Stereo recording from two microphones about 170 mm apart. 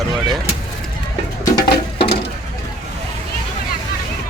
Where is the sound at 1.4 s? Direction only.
30° left (ahead or behind).